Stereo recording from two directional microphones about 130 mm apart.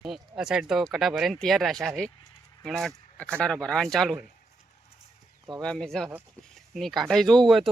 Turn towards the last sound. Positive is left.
turn(degrees=0)  # may be behind; listen again after turning